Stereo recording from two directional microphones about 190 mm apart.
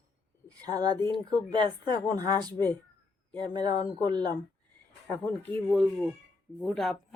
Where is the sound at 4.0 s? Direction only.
20° right (ahead or behind).